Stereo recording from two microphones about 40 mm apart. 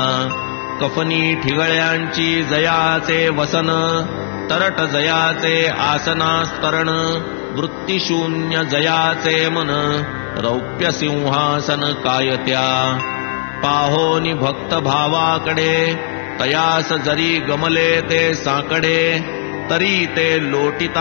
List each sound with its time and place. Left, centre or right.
0.0 s music: right
1.5 s mantra: centre